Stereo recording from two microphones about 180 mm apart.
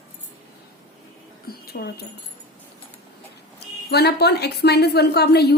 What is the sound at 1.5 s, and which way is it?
Speech, 60° left (ahead or behind).